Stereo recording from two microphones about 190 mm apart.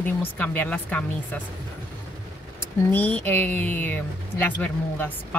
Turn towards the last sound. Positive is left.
turn(degrees=10)  # may be behind; listen again after turning